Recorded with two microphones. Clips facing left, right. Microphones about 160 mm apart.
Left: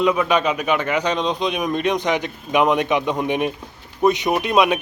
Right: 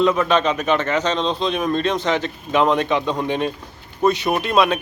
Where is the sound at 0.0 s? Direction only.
10° left (ahead or behind).